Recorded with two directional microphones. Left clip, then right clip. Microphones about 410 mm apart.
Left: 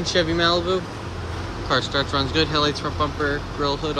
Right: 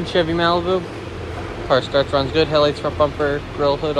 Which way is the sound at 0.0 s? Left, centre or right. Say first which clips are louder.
Right 2 dB; centre.